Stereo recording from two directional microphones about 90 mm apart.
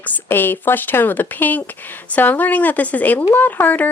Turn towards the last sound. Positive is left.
turn(degrees=20)  # may be behind; listen again after turning